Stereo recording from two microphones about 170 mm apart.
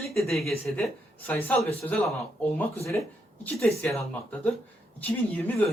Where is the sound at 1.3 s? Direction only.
10° left (ahead or behind).